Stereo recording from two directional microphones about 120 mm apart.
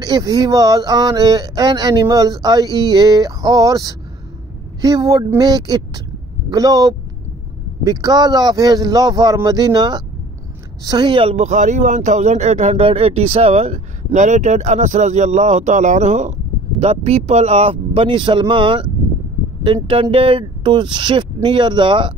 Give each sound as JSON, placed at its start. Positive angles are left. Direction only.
{"t": 0.0, "sound": "speech", "side_deg": -30}
{"t": 12.8, "sound": "speech", "side_deg": -55}
{"t": 16.8, "sound": "speech", "side_deg": -60}